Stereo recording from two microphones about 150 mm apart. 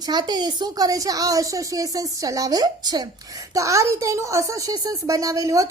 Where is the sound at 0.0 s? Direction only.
30° right (ahead or behind).